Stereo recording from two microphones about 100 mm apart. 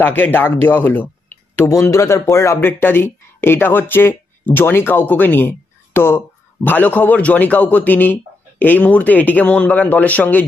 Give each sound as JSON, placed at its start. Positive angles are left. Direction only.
{"t": 0.0, "sound": "speech", "side_deg": 20}